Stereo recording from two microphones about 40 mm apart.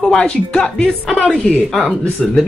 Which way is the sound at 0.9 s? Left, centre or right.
Centre.